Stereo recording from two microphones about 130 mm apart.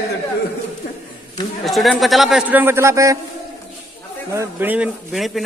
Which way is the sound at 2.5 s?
15° right (ahead or behind).